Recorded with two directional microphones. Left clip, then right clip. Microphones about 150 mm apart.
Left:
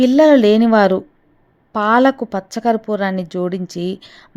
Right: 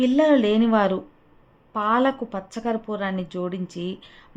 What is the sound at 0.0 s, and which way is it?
Speech, 40° left (ahead or behind).